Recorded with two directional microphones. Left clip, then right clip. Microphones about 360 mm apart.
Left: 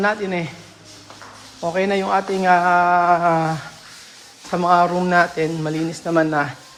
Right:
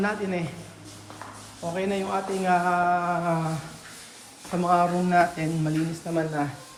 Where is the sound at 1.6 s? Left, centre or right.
Centre.